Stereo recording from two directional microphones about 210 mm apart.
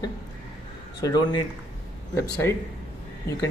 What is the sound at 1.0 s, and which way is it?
Speech, 15° left (ahead or behind).